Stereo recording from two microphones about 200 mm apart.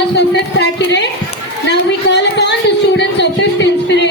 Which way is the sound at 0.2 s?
60° left (ahead or behind).